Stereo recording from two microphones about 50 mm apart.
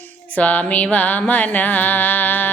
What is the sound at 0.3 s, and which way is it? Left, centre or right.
Music, left.